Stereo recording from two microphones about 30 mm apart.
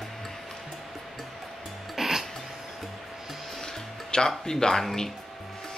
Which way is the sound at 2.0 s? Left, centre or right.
Centre.